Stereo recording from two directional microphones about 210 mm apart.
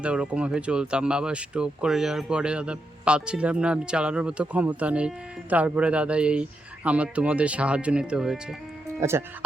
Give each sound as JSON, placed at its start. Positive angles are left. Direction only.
{"t": 0.0, "sound": "speech", "side_deg": -5}